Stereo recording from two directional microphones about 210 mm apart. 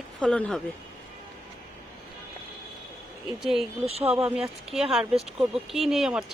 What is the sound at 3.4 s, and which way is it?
Speech, centre (ahead or behind).